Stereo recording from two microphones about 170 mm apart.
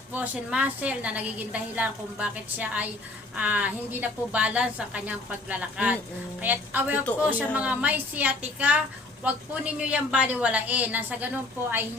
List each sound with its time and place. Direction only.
0.1 s a woman's voice: 10° right (ahead or behind)